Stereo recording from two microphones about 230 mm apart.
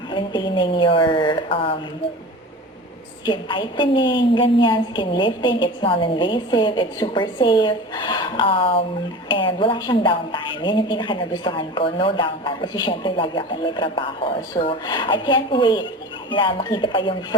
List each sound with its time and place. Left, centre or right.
0.1 s a woman's voice: left
3.2 s a woman's voice: left